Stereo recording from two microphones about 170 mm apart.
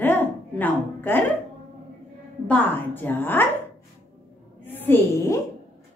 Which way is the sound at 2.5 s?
10° left (ahead or behind).